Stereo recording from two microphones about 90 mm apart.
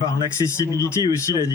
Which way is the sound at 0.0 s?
35° left (ahead or behind).